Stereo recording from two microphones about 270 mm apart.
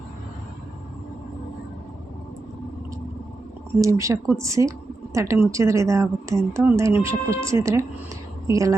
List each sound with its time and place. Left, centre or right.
3.8 s a woman's voice: centre